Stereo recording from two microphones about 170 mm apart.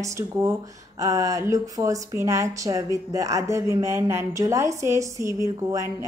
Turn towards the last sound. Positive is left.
turn(degrees=-20)  # may be behind; listen again after turning